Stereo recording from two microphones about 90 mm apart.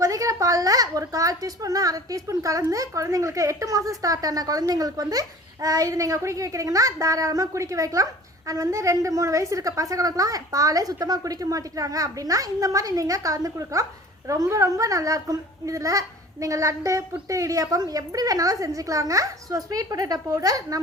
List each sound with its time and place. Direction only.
0.0 s a child's voice: 40° right (ahead or behind)